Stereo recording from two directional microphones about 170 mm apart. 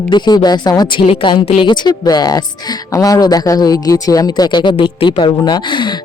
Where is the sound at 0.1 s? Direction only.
25° left (ahead or behind).